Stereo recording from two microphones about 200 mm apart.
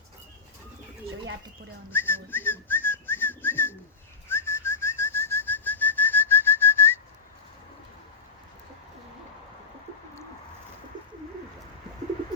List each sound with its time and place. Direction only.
1.9 s whistling: 10° left (ahead or behind)
10.9 s bird: 20° right (ahead or behind)